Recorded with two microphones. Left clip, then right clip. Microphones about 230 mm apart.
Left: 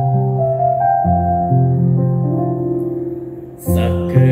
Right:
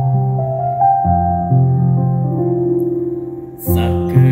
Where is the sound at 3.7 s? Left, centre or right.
Right.